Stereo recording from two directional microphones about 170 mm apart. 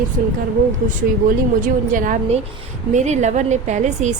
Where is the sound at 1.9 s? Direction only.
50° right (ahead or behind).